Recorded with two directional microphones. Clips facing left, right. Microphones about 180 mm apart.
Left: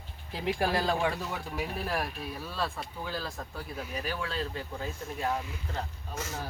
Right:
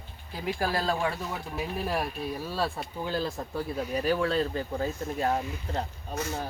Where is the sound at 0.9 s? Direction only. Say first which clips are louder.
Even; centre (ahead or behind).